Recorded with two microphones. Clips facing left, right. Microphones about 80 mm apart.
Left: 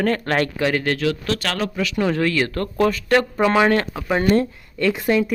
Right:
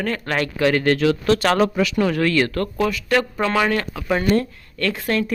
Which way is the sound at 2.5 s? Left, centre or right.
Left.